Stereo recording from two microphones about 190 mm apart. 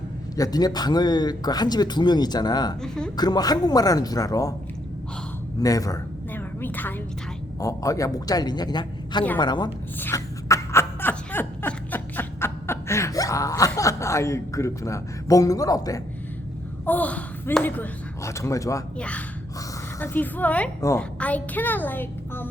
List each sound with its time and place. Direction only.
0.3 s speech: 20° left (ahead or behind)
2.8 s speech: 5° left (ahead or behind)
3.2 s speech: 20° left (ahead or behind)
5.5 s a woman's voice: 20° left (ahead or behind)
10.0 s laughter: 15° left (ahead or behind)
16.8 s speech: 10° left (ahead or behind)
18.9 s a woman's voice: 5° left (ahead or behind)